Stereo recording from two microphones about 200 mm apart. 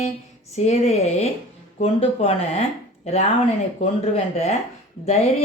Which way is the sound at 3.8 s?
35° left (ahead or behind).